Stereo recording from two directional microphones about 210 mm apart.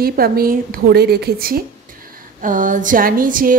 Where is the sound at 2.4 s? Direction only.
40° right (ahead or behind).